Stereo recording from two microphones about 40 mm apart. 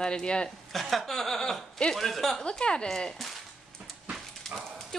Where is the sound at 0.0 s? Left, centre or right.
Left.